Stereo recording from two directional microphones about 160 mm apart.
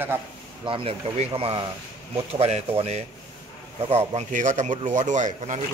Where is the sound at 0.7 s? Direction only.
35° right (ahead or behind).